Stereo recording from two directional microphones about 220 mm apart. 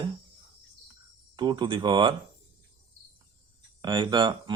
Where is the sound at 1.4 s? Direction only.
20° right (ahead or behind).